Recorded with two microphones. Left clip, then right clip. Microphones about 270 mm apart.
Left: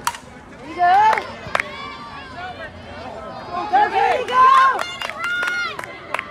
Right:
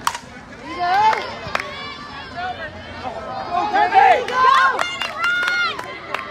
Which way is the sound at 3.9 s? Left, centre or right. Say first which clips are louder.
Right 5 dB; right.